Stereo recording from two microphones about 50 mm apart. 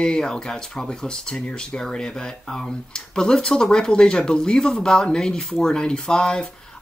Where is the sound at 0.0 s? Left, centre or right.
Centre.